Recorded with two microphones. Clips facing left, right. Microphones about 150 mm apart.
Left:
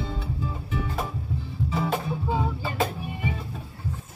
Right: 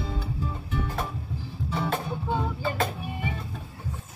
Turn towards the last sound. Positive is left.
turn(degrees=0)  # may be behind; listen again after turning